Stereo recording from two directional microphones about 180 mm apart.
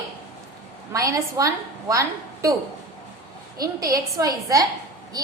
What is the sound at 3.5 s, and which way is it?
A woman's voice, 20° right (ahead or behind).